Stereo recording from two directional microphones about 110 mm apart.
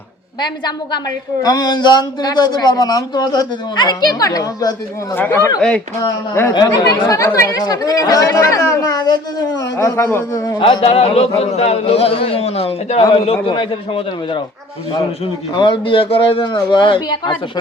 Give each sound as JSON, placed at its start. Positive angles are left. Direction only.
{"t": 1.4, "sound": "speech", "side_deg": 35}
{"t": 5.1, "sound": "speech", "side_deg": 20}
{"t": 5.5, "sound": "speech", "side_deg": 5}
{"t": 6.0, "sound": "speech", "side_deg": 20}
{"t": 6.5, "sound": "speech", "side_deg": 40}
{"t": 9.7, "sound": "speech", "side_deg": 25}
{"t": 10.6, "sound": "a man's voice", "side_deg": 60}
{"t": 15.5, "sound": "speech", "side_deg": 45}